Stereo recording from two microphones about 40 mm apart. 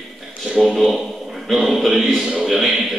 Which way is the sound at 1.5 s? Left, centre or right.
Centre.